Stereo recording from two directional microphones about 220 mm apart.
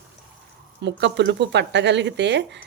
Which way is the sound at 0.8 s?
55° right (ahead or behind).